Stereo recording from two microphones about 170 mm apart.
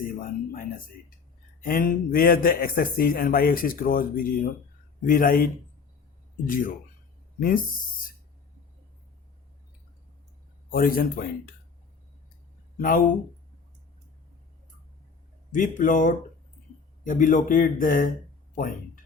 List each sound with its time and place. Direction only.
0.2 s a sound: 55° left (ahead or behind)
1.6 s speech: 55° left (ahead or behind)
6.5 s a man's voice: 50° left (ahead or behind)
10.7 s speech: 60° left (ahead or behind)
12.7 s speech: 60° left (ahead or behind)
15.5 s a man's voice: 50° left (ahead or behind)